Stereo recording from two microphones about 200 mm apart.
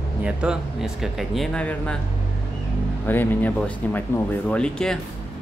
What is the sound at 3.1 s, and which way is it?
Speech, 10° left (ahead or behind).